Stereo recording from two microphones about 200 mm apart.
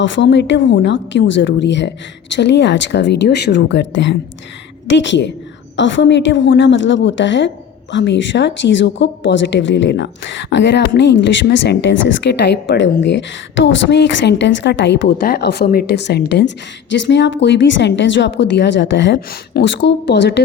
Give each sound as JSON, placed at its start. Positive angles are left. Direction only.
{"t": 0.0, "sound": "a woman's voice", "side_deg": 60}